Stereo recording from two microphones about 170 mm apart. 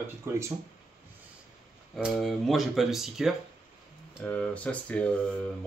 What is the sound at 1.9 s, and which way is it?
Speech, centre (ahead or behind).